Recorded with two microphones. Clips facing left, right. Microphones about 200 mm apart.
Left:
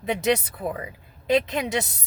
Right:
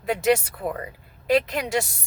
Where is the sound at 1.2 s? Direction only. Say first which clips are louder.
Even; 20° left (ahead or behind).